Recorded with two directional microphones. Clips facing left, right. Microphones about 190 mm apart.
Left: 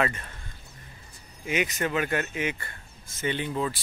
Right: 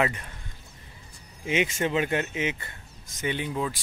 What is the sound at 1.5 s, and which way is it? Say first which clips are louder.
Speech: right 2 dB; 25° right (ahead or behind).